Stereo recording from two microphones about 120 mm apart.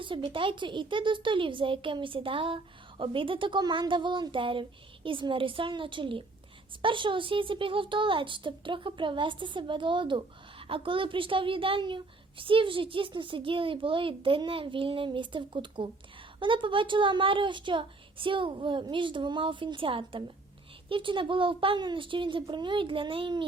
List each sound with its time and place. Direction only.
0.3 s speech: 45° right (ahead or behind)